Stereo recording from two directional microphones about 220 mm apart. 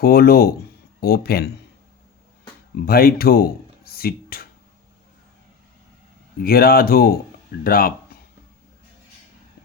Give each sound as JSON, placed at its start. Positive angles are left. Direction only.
{"t": 0.0, "sound": "speech", "side_deg": 45}
{"t": 2.8, "sound": "speech", "side_deg": 45}
{"t": 6.4, "sound": "speech", "side_deg": 45}